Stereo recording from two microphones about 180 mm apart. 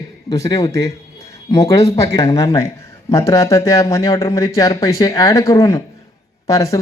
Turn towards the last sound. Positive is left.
turn(degrees=15)  # may be behind; listen again after turning